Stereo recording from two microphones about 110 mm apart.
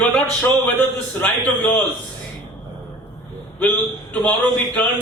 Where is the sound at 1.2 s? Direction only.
15° left (ahead or behind).